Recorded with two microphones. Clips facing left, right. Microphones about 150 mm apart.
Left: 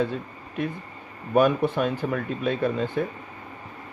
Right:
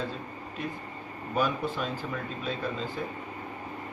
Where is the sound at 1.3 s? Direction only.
60° left (ahead or behind).